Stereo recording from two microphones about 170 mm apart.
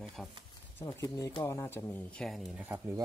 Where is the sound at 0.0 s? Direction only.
5° left (ahead or behind).